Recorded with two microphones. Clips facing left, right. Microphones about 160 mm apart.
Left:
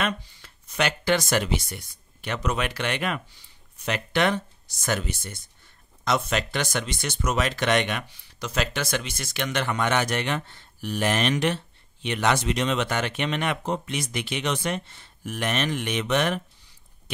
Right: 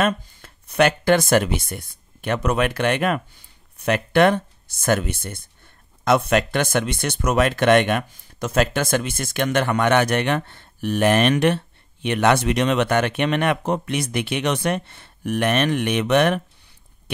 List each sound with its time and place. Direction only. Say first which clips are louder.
0.0 s speech: right 7 dB; 50° right (ahead or behind)